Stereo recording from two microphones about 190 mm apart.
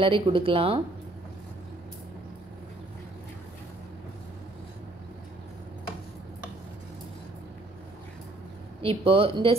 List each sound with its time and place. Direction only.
0.0 s speech: 30° right (ahead or behind)
8.8 s speech: 30° right (ahead or behind)